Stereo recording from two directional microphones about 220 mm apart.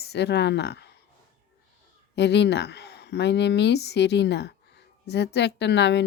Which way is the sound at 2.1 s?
50° left (ahead or behind).